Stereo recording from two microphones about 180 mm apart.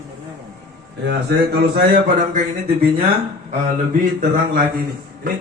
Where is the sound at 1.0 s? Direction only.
65° right (ahead or behind).